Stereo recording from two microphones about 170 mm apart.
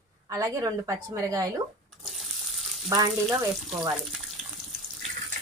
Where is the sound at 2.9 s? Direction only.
20° right (ahead or behind).